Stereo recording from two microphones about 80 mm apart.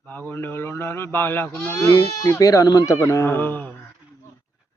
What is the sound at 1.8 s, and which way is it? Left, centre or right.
Speech, left.